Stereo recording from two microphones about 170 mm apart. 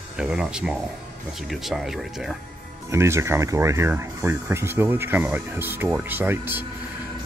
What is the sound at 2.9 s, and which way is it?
Speech, 15° right (ahead or behind).